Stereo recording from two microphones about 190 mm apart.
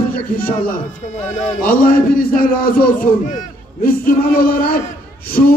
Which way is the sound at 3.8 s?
50° left (ahead or behind).